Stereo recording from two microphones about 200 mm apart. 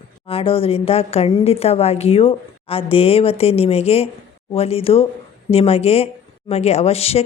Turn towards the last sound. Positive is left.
turn(degrees=30)  # may be behind; listen again after turning